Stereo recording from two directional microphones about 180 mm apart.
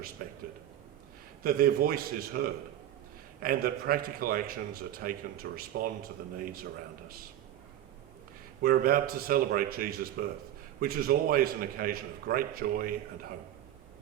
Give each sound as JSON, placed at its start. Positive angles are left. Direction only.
{"t": 0.2, "sound": "speech", "side_deg": -50}
{"t": 1.5, "sound": "a man's voice", "side_deg": -55}
{"t": 8.6, "sound": "a man's voice", "side_deg": -55}